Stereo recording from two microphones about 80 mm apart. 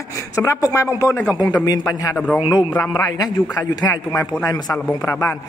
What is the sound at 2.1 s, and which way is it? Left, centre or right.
Speech, centre.